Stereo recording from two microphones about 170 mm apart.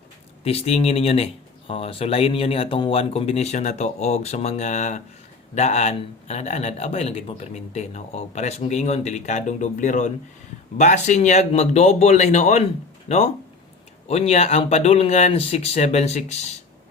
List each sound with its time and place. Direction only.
0.4 s speech: 35° left (ahead or behind)